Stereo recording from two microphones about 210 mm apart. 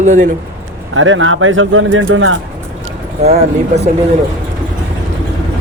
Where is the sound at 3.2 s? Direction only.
30° right (ahead or behind).